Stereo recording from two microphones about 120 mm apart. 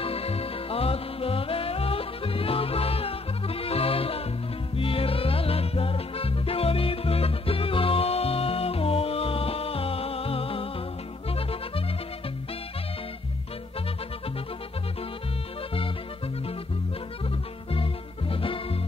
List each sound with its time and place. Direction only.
0.0 s music: 55° left (ahead or behind)
18.3 s music: 50° left (ahead or behind)